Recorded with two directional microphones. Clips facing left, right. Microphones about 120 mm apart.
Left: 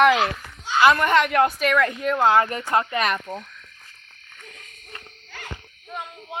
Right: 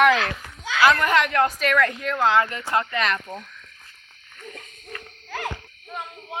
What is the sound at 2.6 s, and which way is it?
Speech, 25° left (ahead or behind).